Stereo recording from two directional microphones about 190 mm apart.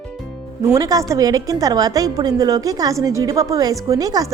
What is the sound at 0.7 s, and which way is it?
A woman's voice, 20° right (ahead or behind).